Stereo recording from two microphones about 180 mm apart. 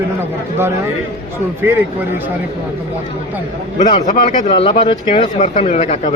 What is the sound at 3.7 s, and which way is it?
Speech, 45° left (ahead or behind).